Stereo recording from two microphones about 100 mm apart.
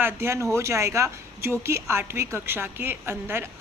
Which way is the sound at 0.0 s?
25° right (ahead or behind).